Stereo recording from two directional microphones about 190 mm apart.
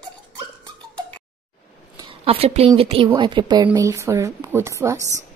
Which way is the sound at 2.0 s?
30° right (ahead or behind).